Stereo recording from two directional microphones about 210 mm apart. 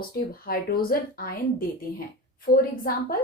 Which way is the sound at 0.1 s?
45° left (ahead or behind).